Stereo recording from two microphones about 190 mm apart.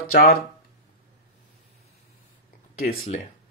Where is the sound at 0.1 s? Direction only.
50° left (ahead or behind).